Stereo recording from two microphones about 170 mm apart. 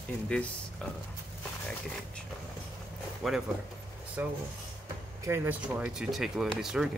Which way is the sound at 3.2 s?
Centre (ahead or behind).